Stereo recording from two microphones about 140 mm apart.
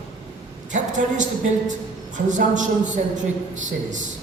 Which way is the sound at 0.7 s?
60° right (ahead or behind).